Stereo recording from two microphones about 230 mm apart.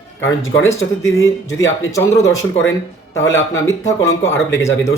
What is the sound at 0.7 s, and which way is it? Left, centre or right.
Speech, centre.